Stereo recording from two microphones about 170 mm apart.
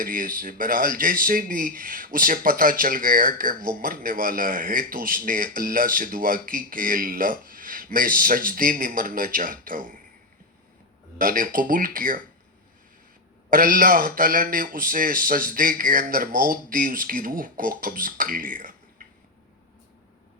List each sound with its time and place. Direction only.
0.0 s speech: 55° right (ahead or behind)
11.2 s speech: 55° right (ahead or behind)
13.5 s speech: 55° right (ahead or behind)